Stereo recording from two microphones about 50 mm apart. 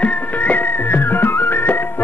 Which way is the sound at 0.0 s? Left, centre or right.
Left.